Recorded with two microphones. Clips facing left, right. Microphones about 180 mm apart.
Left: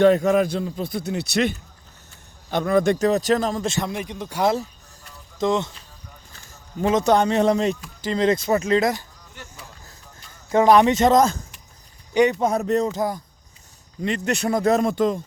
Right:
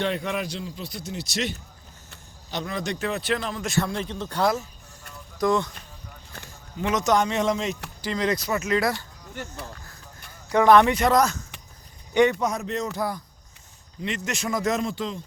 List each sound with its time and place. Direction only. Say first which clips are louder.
0.0 s a man's voice: left 11 dB; 45° left (ahead or behind)
3.7 s speech: even; 20° left (ahead or behind)
6.7 s a man's voice: left 4 dB; 30° left (ahead or behind)
8.1 s speech: left 6 dB; 25° left (ahead or behind)
10.5 s speech: left 2 dB; 20° left (ahead or behind)
12.1 s speech: left 1 dB; 15° left (ahead or behind)
12.4 s a man's voice: left 7 dB; 30° left (ahead or behind)
12.9 s speech: left 4 dB; 20° left (ahead or behind)
14.0 s a man's voice: left 6 dB; 35° left (ahead or behind)
14.8 s a man's voice: left 8 dB; 50° left (ahead or behind)